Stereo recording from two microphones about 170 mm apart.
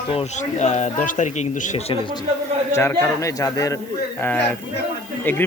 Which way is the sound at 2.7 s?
15° left (ahead or behind).